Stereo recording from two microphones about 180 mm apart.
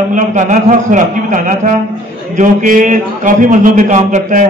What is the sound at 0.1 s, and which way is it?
A man's voice, 45° right (ahead or behind).